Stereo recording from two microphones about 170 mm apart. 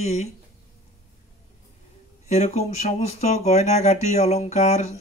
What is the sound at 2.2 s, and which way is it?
Speech, 40° left (ahead or behind).